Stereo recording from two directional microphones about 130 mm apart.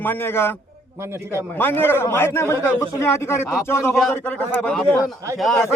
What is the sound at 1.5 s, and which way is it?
A man's voice, 15° left (ahead or behind).